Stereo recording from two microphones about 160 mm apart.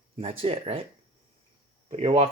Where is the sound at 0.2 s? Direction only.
35° right (ahead or behind).